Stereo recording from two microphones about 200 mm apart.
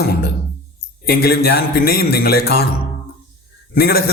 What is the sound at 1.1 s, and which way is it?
Speech, 50° left (ahead or behind).